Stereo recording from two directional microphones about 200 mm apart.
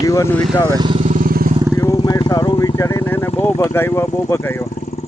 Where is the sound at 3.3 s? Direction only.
10° left (ahead or behind).